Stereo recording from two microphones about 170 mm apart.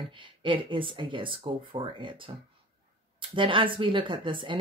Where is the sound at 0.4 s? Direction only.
30° right (ahead or behind).